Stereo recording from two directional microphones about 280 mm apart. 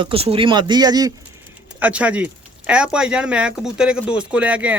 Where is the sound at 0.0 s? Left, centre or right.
Centre.